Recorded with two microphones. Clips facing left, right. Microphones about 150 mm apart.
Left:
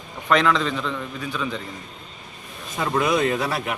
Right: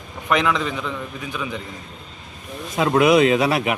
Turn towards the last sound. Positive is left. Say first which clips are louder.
# right 6 dB
turn(degrees=-80)